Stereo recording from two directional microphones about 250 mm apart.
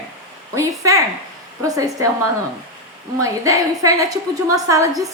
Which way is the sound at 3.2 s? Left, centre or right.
Centre.